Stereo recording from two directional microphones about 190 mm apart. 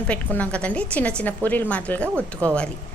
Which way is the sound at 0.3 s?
5° left (ahead or behind).